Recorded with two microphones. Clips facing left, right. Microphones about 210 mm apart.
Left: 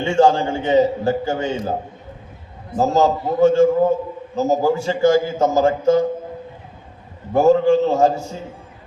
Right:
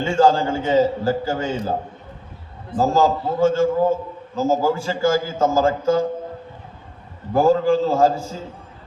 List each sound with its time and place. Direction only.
0.0 s a man's voice: 20° left (ahead or behind)
2.7 s a man's voice: 20° left (ahead or behind)
7.3 s a man's voice: 25° left (ahead or behind)